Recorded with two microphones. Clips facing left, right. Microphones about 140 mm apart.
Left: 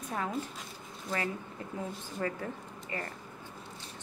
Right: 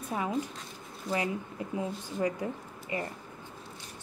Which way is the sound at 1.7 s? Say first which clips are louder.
Right 5 dB; 15° right (ahead or behind).